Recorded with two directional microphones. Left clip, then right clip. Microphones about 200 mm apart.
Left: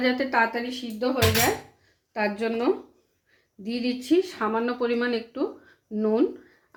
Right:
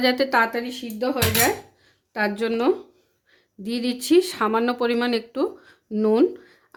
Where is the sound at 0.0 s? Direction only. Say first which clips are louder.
Right 3 dB; 45° right (ahead or behind).